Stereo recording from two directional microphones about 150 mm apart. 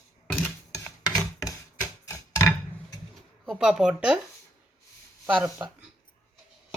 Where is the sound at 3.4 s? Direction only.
Centre (ahead or behind).